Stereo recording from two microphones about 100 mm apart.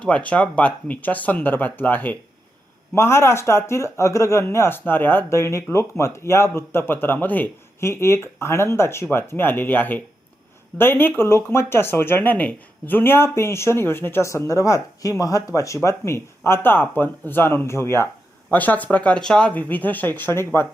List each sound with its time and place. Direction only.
0.0 s speech: 10° left (ahead or behind)